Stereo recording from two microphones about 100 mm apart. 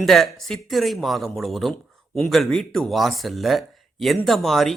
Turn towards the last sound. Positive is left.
turn(degrees=0)  # may be behind; listen again after turning